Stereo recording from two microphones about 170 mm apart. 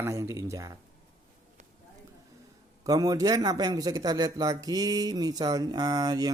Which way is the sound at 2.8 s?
20° right (ahead or behind).